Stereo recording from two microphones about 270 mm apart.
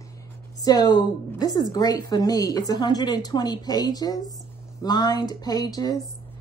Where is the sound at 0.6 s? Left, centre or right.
Centre.